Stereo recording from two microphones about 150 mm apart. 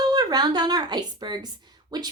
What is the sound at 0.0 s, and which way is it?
Speech, 25° right (ahead or behind).